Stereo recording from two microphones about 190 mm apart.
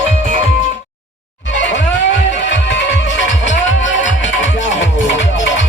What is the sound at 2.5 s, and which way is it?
Music, 70° left (ahead or behind).